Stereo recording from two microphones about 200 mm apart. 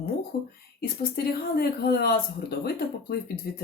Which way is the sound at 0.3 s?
60° left (ahead or behind).